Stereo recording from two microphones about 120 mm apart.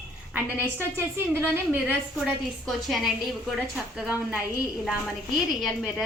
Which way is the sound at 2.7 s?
Centre (ahead or behind).